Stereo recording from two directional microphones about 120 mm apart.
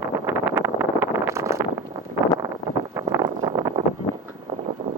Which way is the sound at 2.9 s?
30° right (ahead or behind).